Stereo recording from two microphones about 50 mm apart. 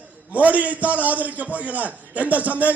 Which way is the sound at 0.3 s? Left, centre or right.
Right.